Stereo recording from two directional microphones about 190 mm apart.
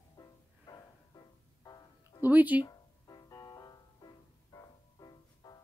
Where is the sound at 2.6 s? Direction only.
20° left (ahead or behind).